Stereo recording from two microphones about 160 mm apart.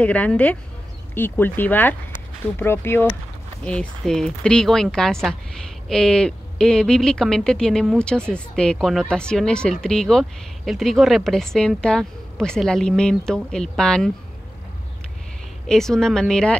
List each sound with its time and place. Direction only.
0.0 s a woman's voice: 10° left (ahead or behind)
15.7 s a woman's voice: 5° left (ahead or behind)